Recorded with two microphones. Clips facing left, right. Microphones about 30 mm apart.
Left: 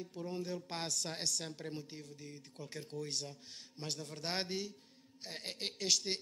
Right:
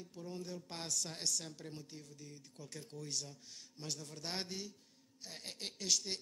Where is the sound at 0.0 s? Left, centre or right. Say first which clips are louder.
Left 5 dB; left.